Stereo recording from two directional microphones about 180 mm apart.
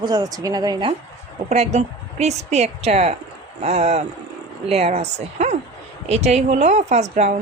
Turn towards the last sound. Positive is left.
turn(degrees=-40)  # may be behind; listen again after turning